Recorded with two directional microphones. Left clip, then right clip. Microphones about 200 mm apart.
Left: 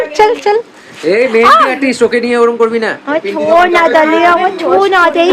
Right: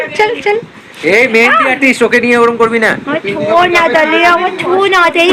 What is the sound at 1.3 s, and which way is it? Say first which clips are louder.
A woman's voice: left 2 dB; centre (ahead or behind).